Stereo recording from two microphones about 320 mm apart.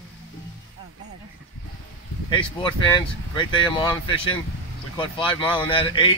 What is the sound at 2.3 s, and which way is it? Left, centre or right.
Speech, centre.